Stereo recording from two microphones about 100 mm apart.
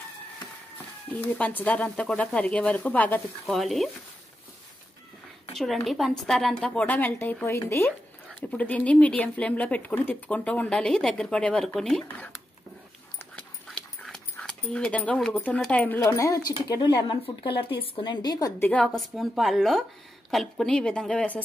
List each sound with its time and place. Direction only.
1.1 s speech: 20° left (ahead or behind)
3.4 s speech: centre (ahead or behind)
5.6 s speech: centre (ahead or behind)
13.7 s dog: 5° left (ahead or behind)
15.1 s speech: 5° left (ahead or behind)
15.7 s speech: 15° left (ahead or behind)
16.2 s speech: 35° left (ahead or behind)
16.6 s speech: 45° left (ahead or behind)
17.2 s speech: 60° left (ahead or behind); by 18.5 s 40° left (ahead or behind)
18.9 s speech: centre (ahead or behind)